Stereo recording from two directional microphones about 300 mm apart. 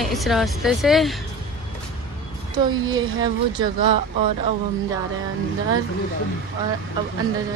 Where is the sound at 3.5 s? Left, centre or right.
Centre.